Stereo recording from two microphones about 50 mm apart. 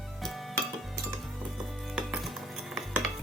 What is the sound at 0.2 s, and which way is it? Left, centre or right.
Music, centre.